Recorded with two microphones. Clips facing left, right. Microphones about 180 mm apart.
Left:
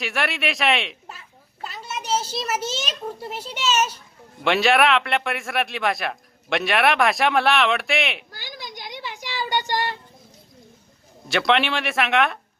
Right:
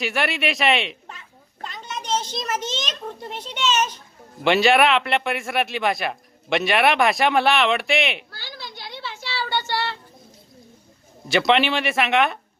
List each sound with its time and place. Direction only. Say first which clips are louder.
0.0 s a child's voice: right 2 dB; centre (ahead or behind)
8.3 s a sound: left 1 dB; 15° left (ahead or behind)
11.3 s speech: right 2 dB; centre (ahead or behind)